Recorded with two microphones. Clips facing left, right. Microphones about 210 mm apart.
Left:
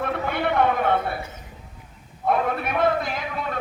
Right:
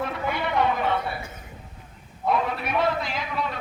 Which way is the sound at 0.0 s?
55° left (ahead or behind).